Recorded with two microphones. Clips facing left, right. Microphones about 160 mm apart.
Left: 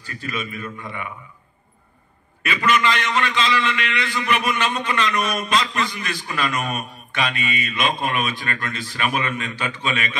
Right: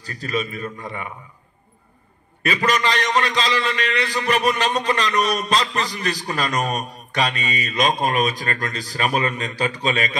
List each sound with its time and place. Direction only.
0.0 s a man's voice: 35° right (ahead or behind)
2.4 s a man's voice: 35° right (ahead or behind)